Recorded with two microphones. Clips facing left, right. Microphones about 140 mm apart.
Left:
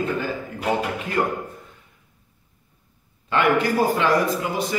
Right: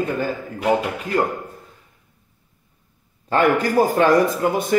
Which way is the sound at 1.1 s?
35° right (ahead or behind).